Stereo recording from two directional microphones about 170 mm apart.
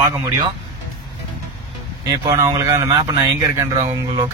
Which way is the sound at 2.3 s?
20° right (ahead or behind).